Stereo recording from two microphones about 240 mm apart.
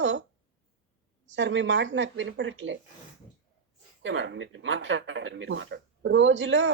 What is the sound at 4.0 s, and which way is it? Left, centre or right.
Speech, right.